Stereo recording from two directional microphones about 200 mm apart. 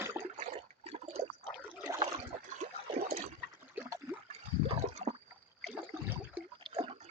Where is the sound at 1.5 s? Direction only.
Centre (ahead or behind).